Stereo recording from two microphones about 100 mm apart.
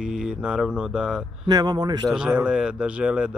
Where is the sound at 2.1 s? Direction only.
10° right (ahead or behind).